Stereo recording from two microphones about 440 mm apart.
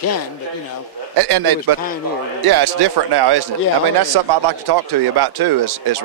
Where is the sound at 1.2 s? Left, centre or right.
Right.